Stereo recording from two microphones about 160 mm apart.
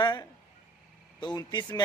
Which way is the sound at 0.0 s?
25° left (ahead or behind).